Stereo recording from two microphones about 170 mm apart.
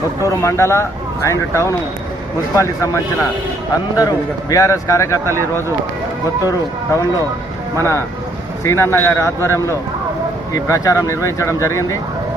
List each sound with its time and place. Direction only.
0.3 s a man's voice: 15° left (ahead or behind)
6.4 s a man's voice: 20° left (ahead or behind)
8.6 s speech: 15° left (ahead or behind)